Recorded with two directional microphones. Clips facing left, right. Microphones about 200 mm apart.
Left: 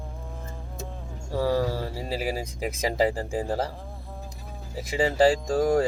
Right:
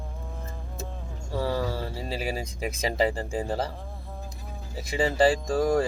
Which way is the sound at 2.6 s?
10° left (ahead or behind).